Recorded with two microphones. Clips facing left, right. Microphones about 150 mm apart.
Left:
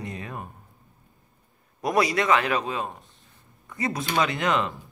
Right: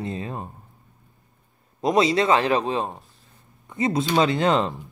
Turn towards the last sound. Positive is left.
turn(degrees=-30)  # may be behind; listen again after turning